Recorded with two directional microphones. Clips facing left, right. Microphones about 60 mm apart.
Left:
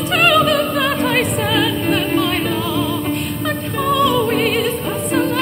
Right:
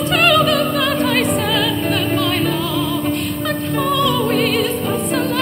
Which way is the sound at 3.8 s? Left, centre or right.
Centre.